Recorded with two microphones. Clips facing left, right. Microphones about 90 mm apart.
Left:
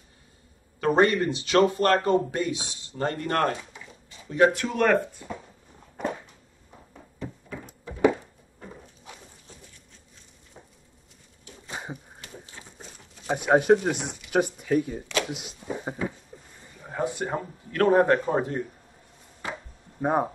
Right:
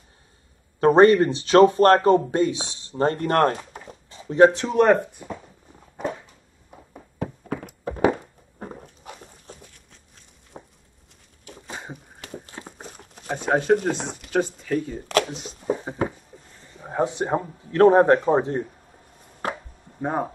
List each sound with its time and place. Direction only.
0.7 s speech: 35° right (ahead or behind)
4.3 s speech: 30° right (ahead or behind)
7.2 s a sound: 60° right (ahead or behind)
12.2 s a sound: 55° right (ahead or behind)
13.3 s speech: 10° left (ahead or behind)
16.0 s a sound: 55° right (ahead or behind)
16.8 s speech: 25° right (ahead or behind)
19.4 s chopping: 55° right (ahead or behind)
20.0 s speech: 10° left (ahead or behind)